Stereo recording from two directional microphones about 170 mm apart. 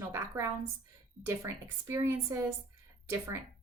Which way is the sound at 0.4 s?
15° right (ahead or behind).